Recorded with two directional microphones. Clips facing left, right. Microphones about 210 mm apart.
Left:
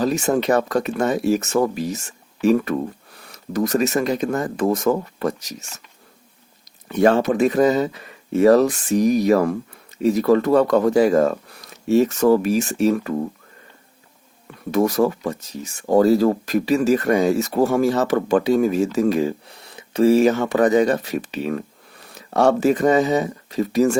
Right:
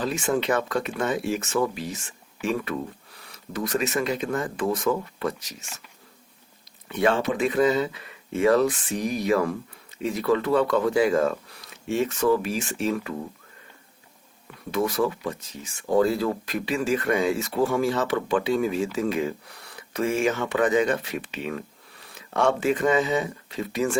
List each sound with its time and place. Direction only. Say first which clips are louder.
0.0 s speech: left 6 dB; 40° left (ahead or behind)
6.8 s speech: left 6 dB; 45° left (ahead or behind)
14.7 s speech: left 6 dB; 45° left (ahead or behind)